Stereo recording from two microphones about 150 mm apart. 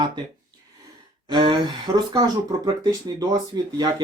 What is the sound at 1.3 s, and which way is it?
Speech, 30° right (ahead or behind).